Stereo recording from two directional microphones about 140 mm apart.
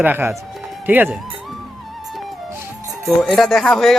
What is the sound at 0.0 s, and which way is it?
Speech, 15° right (ahead or behind).